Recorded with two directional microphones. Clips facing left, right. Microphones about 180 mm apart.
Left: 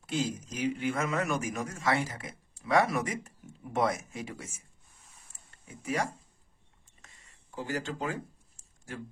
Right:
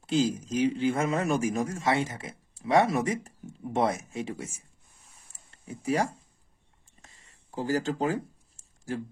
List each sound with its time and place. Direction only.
0.0 s speech: 30° right (ahead or behind)
5.7 s speech: 30° right (ahead or behind)
7.0 s a sound: 30° right (ahead or behind)